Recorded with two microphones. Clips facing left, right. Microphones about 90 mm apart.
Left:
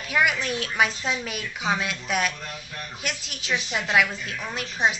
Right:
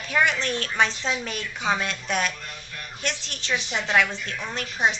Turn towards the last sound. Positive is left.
turn(degrees=5)  # may be behind; listen again after turning